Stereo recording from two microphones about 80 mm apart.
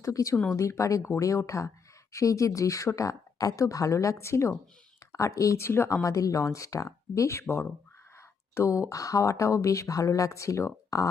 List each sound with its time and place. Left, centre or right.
0.0 s speech: left